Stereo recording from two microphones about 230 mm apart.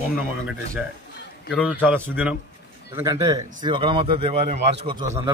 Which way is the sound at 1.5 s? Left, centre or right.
Centre.